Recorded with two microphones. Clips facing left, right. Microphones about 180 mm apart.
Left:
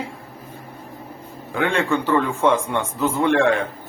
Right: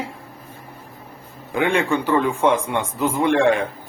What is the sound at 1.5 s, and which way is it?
A man's voice, 15° right (ahead or behind).